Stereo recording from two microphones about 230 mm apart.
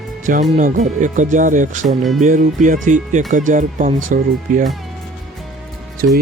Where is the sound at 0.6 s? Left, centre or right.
Right.